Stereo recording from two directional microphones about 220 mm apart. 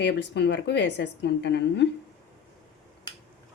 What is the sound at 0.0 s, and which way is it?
A woman's voice, 50° left (ahead or behind).